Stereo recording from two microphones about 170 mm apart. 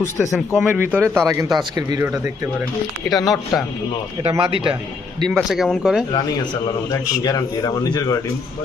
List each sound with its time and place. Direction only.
0.0 s speech: 15° left (ahead or behind)
0.6 s a man's voice: 10° right (ahead or behind)
3.1 s speech: centre (ahead or behind)
4.2 s speech: 35° right (ahead or behind)
5.3 s speech: centre (ahead or behind)
6.2 s speech: 25° left (ahead or behind)